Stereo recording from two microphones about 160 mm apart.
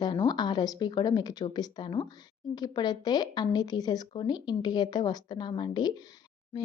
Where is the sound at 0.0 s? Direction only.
30° left (ahead or behind).